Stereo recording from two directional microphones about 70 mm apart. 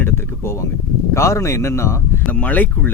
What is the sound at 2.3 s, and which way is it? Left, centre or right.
Speech, left.